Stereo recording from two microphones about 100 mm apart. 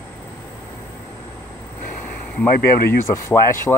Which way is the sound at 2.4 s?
25° left (ahead or behind).